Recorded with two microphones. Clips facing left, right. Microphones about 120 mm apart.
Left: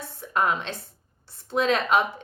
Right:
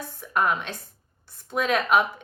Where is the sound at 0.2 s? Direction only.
25° left (ahead or behind).